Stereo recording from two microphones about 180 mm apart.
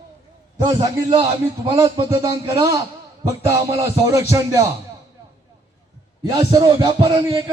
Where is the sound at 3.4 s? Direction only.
15° right (ahead or behind).